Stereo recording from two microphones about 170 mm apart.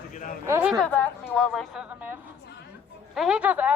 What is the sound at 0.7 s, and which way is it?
Speech, 5° left (ahead or behind).